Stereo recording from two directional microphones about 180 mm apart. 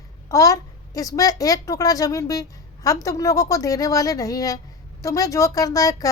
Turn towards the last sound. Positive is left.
turn(degrees=20)  # may be behind; listen again after turning